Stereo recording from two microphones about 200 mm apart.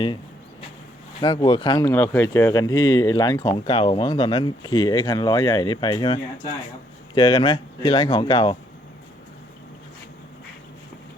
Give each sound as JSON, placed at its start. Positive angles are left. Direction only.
{"t": 1.2, "sound": "speech", "side_deg": 20}
{"t": 1.9, "sound": "speech", "side_deg": 10}